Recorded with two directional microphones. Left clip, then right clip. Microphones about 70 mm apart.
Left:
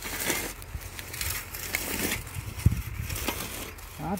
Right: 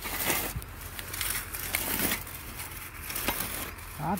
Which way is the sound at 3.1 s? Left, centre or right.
Right.